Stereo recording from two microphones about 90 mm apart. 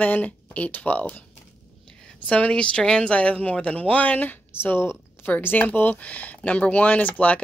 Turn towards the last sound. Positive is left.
turn(degrees=15)  # may be behind; listen again after turning